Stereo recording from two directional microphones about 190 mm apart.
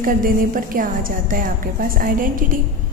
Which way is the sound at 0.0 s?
45° right (ahead or behind).